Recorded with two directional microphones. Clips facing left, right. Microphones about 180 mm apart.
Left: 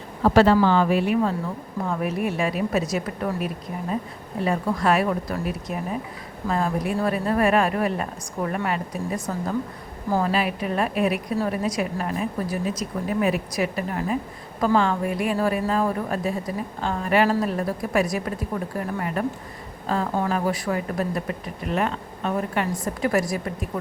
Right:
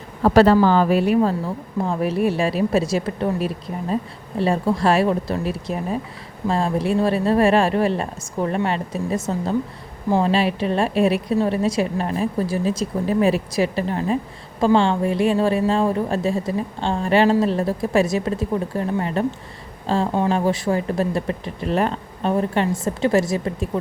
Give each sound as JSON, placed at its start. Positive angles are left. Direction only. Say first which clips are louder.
{"t": 0.3, "sound": "a woman's voice", "louder": "right 3 dB", "side_deg": -40}